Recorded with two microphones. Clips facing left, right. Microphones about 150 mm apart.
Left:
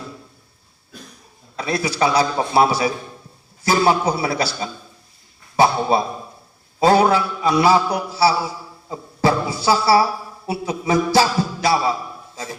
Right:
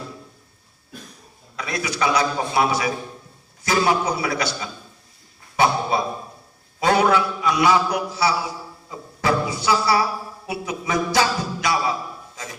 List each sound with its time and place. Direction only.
1.5 s a man's voice: 30° left (ahead or behind)
5.5 s a sound: 30° left (ahead or behind)
6.7 s a man's voice: 30° left (ahead or behind)